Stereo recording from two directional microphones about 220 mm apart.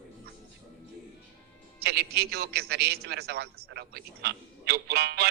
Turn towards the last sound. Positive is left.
turn(degrees=-45)  # may be behind; listen again after turning